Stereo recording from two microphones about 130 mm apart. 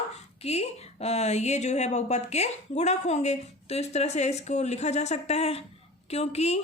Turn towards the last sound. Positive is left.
turn(degrees=55)  # may be behind; listen again after turning